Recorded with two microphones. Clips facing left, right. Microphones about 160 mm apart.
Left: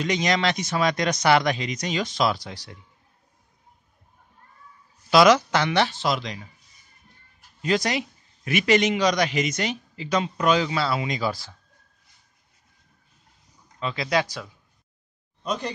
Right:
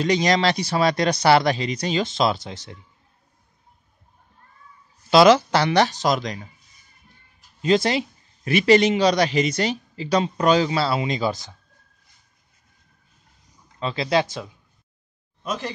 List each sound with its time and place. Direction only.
0.0 s a man's voice: 35° right (ahead or behind)
5.1 s a man's voice: 30° right (ahead or behind)
7.6 s a man's voice: 25° right (ahead or behind)
13.7 s speech: 30° right (ahead or behind)
15.4 s speech: centre (ahead or behind)